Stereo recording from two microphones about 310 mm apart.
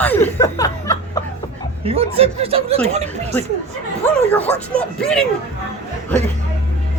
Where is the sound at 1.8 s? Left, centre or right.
Centre.